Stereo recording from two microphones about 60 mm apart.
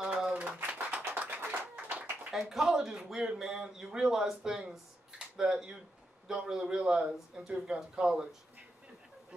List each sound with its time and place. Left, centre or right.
0.0 s a sound: centre
1.8 s clapping: right
2.3 s speech: centre